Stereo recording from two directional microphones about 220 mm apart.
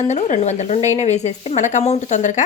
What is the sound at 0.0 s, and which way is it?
Speech, 30° left (ahead or behind).